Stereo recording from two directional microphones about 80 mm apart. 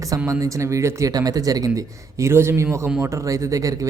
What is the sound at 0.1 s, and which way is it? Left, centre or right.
Speech, right.